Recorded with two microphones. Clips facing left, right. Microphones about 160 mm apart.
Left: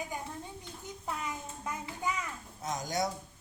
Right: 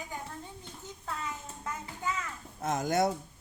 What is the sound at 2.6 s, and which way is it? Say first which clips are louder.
Speech: right 5 dB; 55° right (ahead or behind).